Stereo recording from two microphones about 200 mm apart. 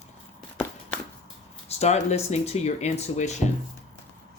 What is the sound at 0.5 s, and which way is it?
Walk, 5° left (ahead or behind).